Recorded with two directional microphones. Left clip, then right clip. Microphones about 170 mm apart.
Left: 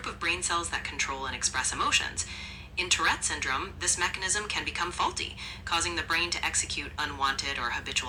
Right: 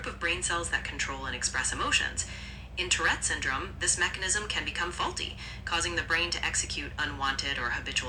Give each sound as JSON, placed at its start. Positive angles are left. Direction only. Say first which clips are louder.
{"t": 0.0, "sound": "a woman's voice", "louder": "left 1 dB", "side_deg": 25}